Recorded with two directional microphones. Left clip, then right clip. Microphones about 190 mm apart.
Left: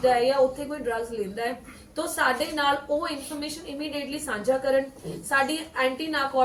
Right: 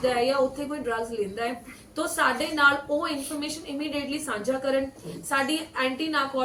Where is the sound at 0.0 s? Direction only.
15° left (ahead or behind).